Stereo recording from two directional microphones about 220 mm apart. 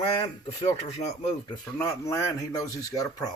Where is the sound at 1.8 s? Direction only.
15° left (ahead or behind).